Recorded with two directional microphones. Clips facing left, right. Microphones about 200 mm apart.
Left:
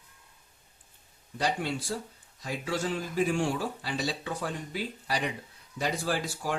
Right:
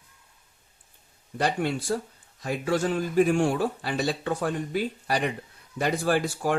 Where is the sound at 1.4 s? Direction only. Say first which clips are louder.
Right 4 dB; 55° right (ahead or behind).